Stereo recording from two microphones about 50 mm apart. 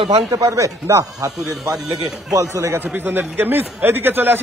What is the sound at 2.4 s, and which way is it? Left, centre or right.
Speech, right.